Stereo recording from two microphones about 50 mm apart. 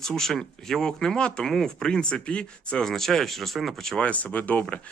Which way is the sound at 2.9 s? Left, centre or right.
Centre.